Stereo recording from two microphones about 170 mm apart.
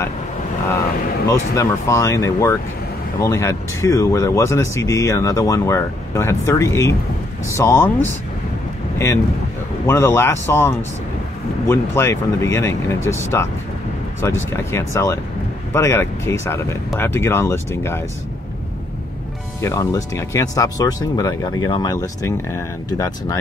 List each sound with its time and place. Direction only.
1.5 s speech: 15° left (ahead or behind)
8.9 s speech: 15° left (ahead or behind)
19.6 s speech: 20° left (ahead or behind)